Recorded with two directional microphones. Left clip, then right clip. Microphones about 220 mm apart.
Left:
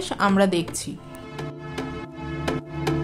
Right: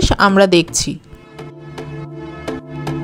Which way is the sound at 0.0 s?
30° right (ahead or behind).